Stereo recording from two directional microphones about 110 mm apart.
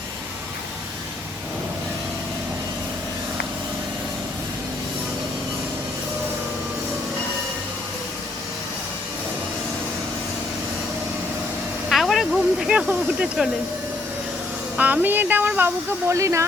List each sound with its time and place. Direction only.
11.9 s snake: centre (ahead or behind)
12.9 s speech: 10° right (ahead or behind)
14.8 s speech: 15° right (ahead or behind)